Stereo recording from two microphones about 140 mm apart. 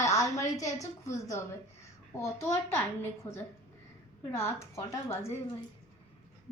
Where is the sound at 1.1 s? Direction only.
20° left (ahead or behind).